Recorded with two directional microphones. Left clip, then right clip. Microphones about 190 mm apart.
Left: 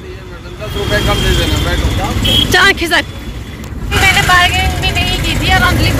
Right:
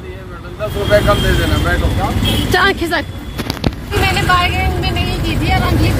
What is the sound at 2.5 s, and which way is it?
Speech, 15° right (ahead or behind).